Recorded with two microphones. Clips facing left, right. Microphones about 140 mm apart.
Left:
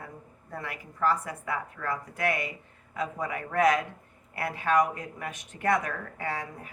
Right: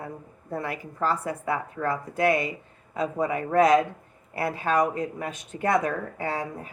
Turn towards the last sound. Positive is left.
turn(degrees=-30)  # may be behind; listen again after turning